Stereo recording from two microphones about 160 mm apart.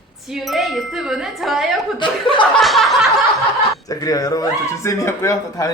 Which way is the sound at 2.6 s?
Centre (ahead or behind).